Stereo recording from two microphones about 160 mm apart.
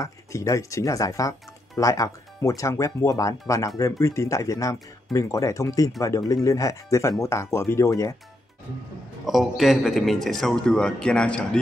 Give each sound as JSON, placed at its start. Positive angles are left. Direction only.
{"t": 0.0, "sound": "speech", "side_deg": 20}
{"t": 9.2, "sound": "a man's voice", "side_deg": 0}